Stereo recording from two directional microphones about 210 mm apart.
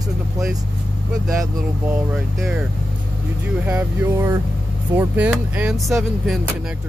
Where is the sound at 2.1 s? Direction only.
5° right (ahead or behind).